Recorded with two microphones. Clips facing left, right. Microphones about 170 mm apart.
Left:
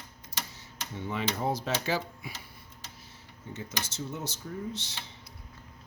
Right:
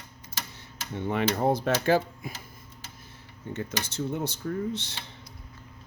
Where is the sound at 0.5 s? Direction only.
60° right (ahead or behind).